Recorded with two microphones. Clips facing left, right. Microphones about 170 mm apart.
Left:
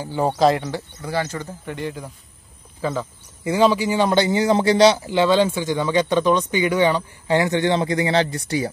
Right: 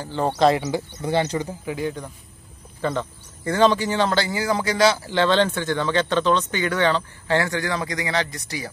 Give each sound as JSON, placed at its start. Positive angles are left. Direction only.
{"t": 0.0, "sound": "speech", "side_deg": 10}
{"t": 0.7, "sound": "speech", "side_deg": -20}
{"t": 1.7, "sound": "a man's voice", "side_deg": 0}
{"t": 5.1, "sound": "speech", "side_deg": 10}